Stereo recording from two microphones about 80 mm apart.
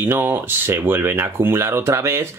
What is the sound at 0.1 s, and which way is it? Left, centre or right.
Speech, right.